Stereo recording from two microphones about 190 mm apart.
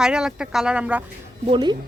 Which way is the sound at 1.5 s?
25° right (ahead or behind).